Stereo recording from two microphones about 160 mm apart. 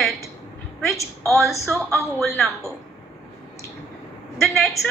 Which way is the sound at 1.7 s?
Centre (ahead or behind).